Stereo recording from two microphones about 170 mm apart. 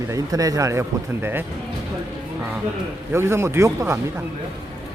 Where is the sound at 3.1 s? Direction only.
15° right (ahead or behind).